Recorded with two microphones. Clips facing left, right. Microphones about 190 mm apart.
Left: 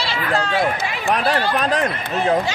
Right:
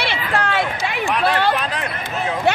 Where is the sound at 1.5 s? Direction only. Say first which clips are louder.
Left 4 dB; 45° left (ahead or behind).